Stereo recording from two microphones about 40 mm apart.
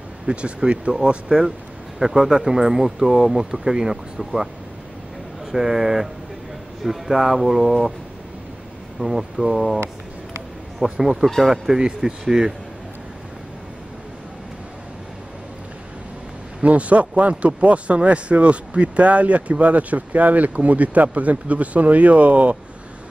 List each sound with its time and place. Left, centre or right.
0.3 s speech: right
2.0 s speech: centre
5.5 s speech: centre
9.0 s speech: centre
10.8 s speech: centre
16.6 s speech: right